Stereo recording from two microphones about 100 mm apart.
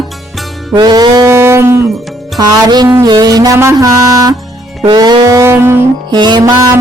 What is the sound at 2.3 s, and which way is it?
Music, 45° right (ahead or behind).